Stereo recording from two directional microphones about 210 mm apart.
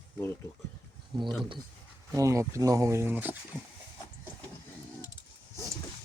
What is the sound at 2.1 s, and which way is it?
Speech, 15° right (ahead or behind).